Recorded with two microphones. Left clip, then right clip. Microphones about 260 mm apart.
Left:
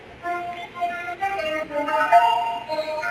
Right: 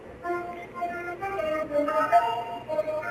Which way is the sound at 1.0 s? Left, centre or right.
Centre.